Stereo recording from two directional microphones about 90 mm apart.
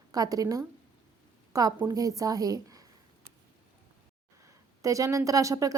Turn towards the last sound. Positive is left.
turn(degrees=-35)  # may be behind; listen again after turning